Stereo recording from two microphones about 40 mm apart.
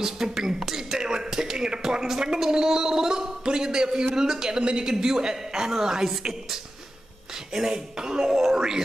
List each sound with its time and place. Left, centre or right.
0.0 s a woman's voice: centre